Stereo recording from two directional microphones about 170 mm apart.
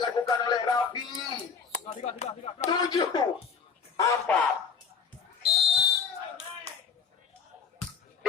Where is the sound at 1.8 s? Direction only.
40° left (ahead or behind).